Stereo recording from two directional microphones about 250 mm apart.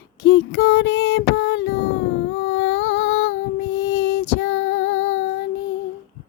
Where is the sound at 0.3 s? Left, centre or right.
Left.